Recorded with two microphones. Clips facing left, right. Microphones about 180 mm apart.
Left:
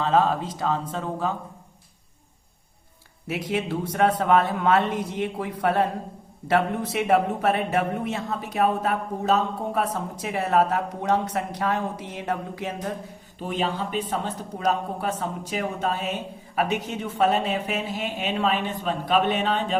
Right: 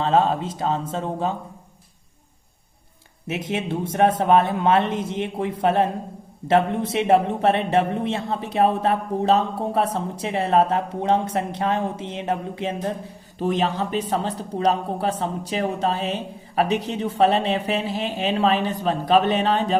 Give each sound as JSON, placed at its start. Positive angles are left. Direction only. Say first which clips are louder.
{"t": 0.0, "sound": "speech", "louder": "right 2 dB", "side_deg": -25}
{"t": 3.2, "sound": "speech", "louder": "right 1 dB", "side_deg": -25}
{"t": 13.4, "sound": "speech", "louder": "right 5 dB", "side_deg": -45}